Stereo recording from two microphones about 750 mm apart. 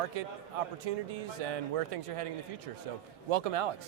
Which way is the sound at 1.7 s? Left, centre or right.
Right.